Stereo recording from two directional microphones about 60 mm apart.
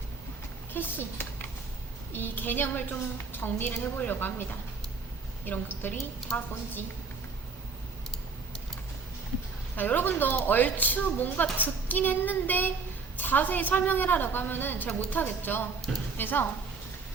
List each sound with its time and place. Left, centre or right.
0.7 s speech: left
6.3 s a woman's voice: centre
9.7 s speech: left